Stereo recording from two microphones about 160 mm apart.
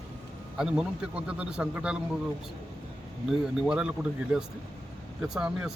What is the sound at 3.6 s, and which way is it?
Speech, 5° right (ahead or behind).